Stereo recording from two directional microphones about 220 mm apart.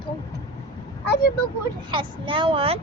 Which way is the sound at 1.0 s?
50° left (ahead or behind).